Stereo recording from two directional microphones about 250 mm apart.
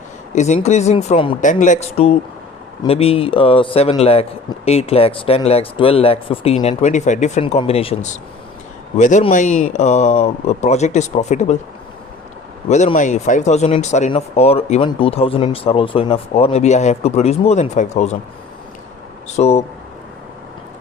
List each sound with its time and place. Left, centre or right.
0.3 s speech: left
12.6 s speech: left
19.4 s speech: left